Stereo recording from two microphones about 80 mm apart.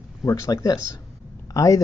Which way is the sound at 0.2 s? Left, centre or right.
Left.